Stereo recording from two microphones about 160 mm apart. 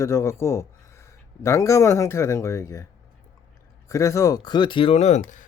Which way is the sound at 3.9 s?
20° left (ahead or behind).